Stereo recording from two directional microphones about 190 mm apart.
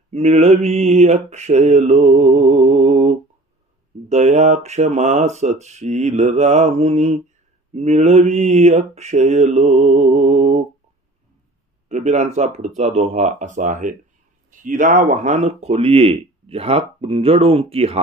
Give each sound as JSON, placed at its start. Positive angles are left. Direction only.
{"t": 0.1, "sound": "speech", "side_deg": -35}
{"t": 11.9, "sound": "speech", "side_deg": -40}